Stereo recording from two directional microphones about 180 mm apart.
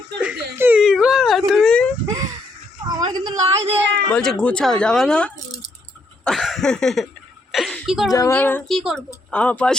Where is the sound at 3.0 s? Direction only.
25° right (ahead or behind).